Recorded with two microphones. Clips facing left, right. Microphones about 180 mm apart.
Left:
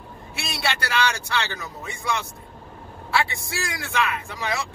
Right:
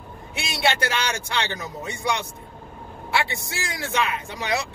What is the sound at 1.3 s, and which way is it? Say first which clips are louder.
Speech: right 1 dB; 20° right (ahead or behind).